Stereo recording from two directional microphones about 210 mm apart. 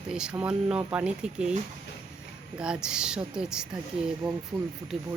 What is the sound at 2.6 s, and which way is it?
Speech, 5° right (ahead or behind).